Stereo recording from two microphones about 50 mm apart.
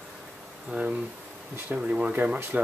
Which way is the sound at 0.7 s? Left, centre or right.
Right.